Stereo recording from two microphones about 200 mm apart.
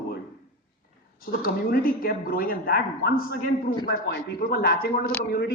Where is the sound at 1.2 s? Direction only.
50° left (ahead or behind).